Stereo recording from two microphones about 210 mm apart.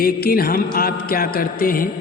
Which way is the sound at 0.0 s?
45° left (ahead or behind).